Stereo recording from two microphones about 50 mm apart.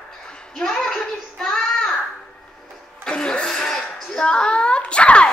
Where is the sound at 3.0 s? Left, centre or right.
Centre.